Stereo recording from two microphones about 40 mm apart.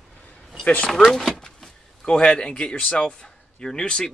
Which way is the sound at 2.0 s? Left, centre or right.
Left.